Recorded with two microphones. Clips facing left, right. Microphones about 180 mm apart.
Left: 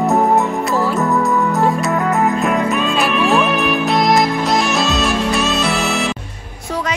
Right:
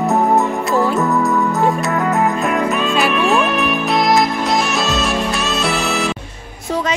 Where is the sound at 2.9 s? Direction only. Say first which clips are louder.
Even; centre (ahead or behind).